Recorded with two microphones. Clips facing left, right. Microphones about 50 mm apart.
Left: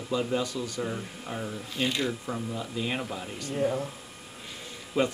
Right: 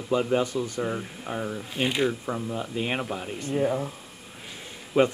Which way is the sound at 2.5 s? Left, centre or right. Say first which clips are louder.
Right 3 dB; right.